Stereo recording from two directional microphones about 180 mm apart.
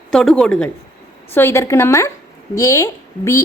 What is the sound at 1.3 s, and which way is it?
A woman's voice, 15° left (ahead or behind).